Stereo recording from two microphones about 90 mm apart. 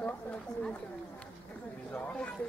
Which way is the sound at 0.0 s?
15° left (ahead or behind).